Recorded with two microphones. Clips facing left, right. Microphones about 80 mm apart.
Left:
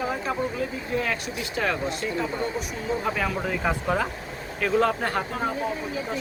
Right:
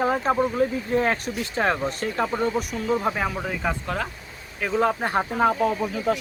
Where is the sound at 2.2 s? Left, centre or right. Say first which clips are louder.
Right 4 dB; right.